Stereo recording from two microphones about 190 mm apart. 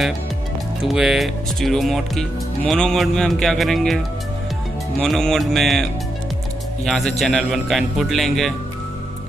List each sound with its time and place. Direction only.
0.8 s speech: centre (ahead or behind)
5.0 s speech: centre (ahead or behind)
7.1 s speech: 5° left (ahead or behind)